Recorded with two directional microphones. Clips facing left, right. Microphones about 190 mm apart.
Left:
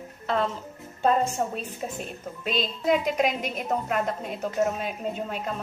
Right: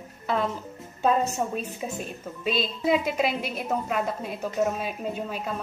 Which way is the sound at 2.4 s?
5° right (ahead or behind).